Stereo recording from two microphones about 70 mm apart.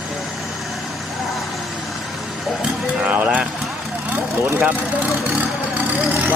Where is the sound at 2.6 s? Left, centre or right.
Centre.